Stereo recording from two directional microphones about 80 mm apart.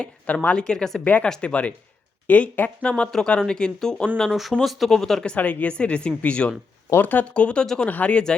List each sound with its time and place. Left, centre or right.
0.0 s speech: centre
1.0 s speech: centre